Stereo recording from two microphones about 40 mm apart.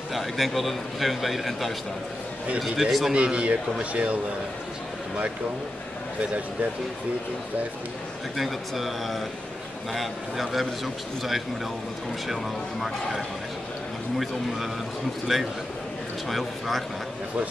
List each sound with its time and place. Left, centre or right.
0.1 s a man's voice: centre
3.1 s a man's voice: right
8.4 s a man's voice: centre
14.1 s a man's voice: centre